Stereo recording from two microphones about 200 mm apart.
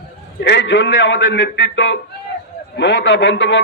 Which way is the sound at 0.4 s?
65° left (ahead or behind).